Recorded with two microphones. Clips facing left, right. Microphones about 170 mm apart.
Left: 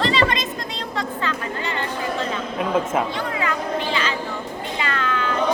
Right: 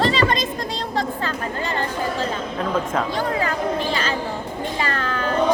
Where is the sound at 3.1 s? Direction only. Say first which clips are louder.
Right 2 dB; 40° right (ahead or behind).